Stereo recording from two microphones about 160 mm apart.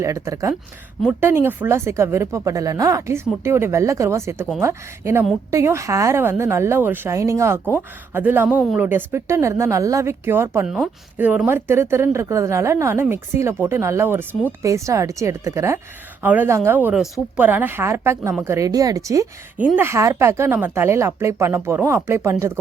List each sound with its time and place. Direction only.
0.0 s speech: 20° right (ahead or behind)